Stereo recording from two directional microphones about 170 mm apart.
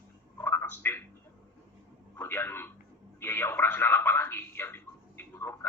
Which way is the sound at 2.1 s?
15° left (ahead or behind).